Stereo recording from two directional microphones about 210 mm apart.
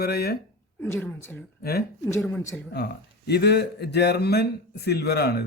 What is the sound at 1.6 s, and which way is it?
A woman's voice, 45° left (ahead or behind).